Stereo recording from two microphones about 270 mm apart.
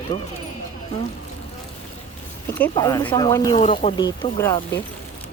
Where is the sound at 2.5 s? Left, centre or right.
Centre.